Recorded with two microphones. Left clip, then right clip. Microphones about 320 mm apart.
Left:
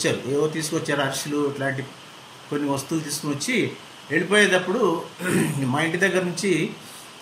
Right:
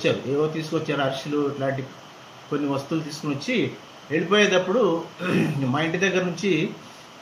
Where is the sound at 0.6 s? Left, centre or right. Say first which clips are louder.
Left 1 dB; left.